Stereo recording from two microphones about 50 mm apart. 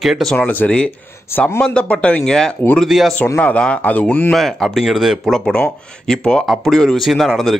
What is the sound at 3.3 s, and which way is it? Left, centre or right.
Speech, left.